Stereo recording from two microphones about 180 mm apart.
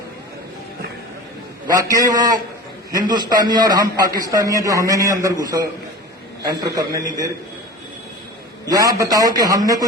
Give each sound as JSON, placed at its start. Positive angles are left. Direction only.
{"t": 1.7, "sound": "a man's voice", "side_deg": -20}
{"t": 8.7, "sound": "a man's voice", "side_deg": -20}